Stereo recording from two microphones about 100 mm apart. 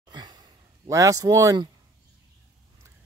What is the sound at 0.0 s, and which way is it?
Sigh, 45° right (ahead or behind).